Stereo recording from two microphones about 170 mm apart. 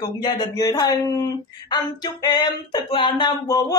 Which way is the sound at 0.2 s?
20° left (ahead or behind).